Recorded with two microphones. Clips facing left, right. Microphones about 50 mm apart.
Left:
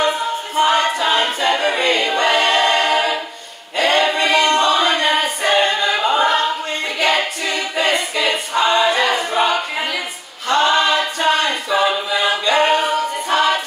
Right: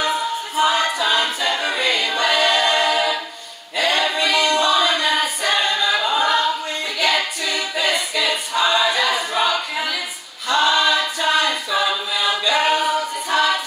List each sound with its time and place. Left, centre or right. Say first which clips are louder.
0.6 s choir: left 3 dB; left
7.0 s a capella: left 2 dB; left
13.3 s music: left 2 dB; left